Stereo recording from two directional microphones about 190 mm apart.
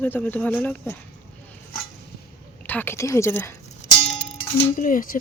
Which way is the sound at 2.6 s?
10° left (ahead or behind).